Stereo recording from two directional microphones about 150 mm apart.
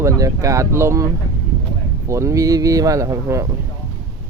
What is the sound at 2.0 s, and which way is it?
Speech, 20° right (ahead or behind).